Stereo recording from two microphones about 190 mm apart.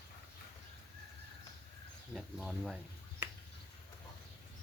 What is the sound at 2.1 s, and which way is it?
Speech, centre (ahead or behind).